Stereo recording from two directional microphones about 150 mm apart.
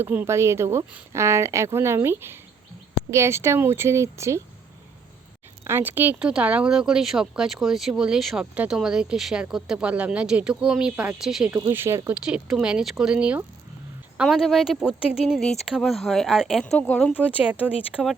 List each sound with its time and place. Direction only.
0.0 s speech: 15° right (ahead or behind)
5.6 s speech: 15° right (ahead or behind)
11.7 s speech: 15° right (ahead or behind)
16.7 s speech: 10° left (ahead or behind)
17.2 s speech: 10° right (ahead or behind)